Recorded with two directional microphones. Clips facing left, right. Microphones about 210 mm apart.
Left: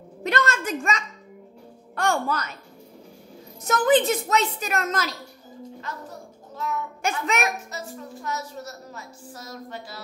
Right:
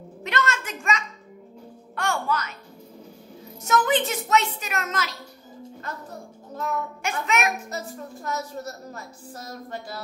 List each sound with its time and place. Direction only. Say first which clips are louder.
0.2 s music: left 3 dB; 35° left (ahead or behind)
2.0 s a child's voice: left 2 dB; 35° left (ahead or behind)
3.6 s a child's voice: left 3 dB; 35° left (ahead or behind)
7.0 s a child's voice: left 2 dB; 35° left (ahead or behind)
7.7 s a woman's voice: right 2 dB; 45° right (ahead or behind)